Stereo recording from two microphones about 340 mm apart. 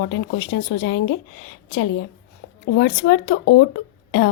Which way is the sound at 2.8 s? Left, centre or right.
Left.